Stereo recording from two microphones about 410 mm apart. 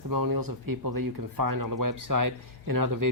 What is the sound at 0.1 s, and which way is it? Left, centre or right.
Speech, right.